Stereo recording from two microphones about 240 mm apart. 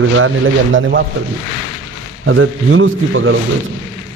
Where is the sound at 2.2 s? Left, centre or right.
Right.